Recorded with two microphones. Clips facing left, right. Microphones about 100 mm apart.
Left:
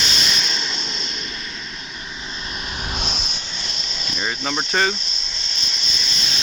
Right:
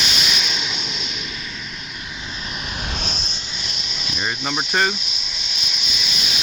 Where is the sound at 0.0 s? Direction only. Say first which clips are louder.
Even; 5° right (ahead or behind).